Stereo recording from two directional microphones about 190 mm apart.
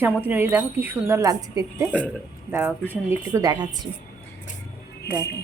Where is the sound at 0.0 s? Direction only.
10° right (ahead or behind).